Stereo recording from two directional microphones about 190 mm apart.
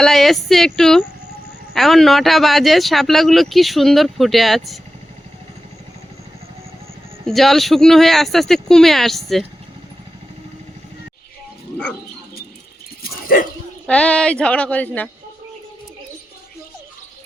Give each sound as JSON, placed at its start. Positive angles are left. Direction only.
{"t": 0.0, "sound": "speech", "side_deg": 0}
{"t": 7.3, "sound": "speech", "side_deg": 0}
{"t": 13.0, "sound": "dog", "side_deg": 50}
{"t": 13.8, "sound": "speech", "side_deg": 5}